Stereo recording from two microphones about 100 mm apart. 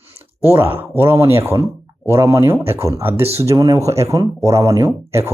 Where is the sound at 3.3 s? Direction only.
35° right (ahead or behind).